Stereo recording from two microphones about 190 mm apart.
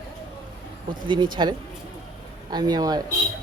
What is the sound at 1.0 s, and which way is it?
Speech, 25° right (ahead or behind).